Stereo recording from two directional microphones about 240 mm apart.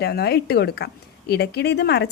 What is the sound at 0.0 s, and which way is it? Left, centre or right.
A woman's voice, left.